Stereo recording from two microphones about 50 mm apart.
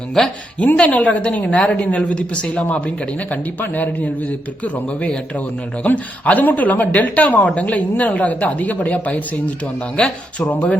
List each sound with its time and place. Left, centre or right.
0.2 s speech: centre
0.8 s a woman's voice: left